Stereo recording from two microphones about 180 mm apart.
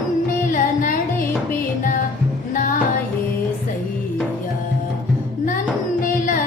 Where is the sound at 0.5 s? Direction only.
45° left (ahead or behind).